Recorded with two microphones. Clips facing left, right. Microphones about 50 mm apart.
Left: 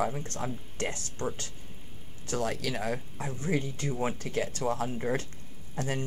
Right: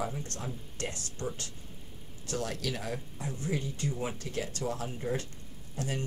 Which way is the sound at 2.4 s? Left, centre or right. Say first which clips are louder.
Left 4 dB; left.